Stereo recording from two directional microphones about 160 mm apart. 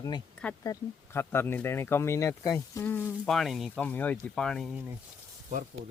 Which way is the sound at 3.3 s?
Centre (ahead or behind).